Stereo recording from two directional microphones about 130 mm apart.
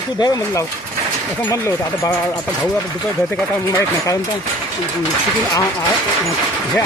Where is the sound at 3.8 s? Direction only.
25° left (ahead or behind).